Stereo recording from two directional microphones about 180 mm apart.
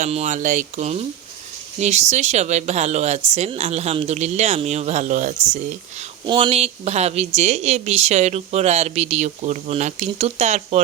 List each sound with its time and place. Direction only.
0.0 s speech: 40° right (ahead or behind)
6.2 s speech: 30° right (ahead or behind)